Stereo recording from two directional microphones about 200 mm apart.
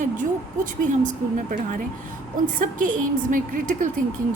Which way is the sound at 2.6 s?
40° right (ahead or behind).